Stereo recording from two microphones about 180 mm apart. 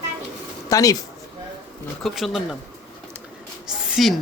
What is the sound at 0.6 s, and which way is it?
Speech, 20° left (ahead or behind).